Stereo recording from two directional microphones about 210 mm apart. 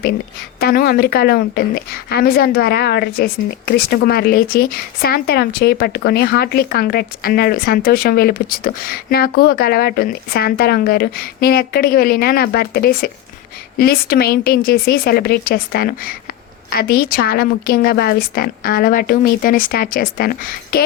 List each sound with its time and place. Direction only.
0.6 s a woman's voice: 45° left (ahead or behind)